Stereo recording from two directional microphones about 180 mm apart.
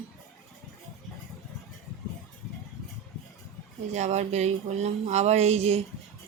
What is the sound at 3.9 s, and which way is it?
Speech, 40° right (ahead or behind).